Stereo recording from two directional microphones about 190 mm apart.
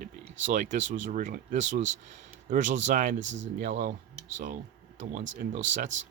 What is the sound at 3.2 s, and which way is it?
Speech, 75° right (ahead or behind).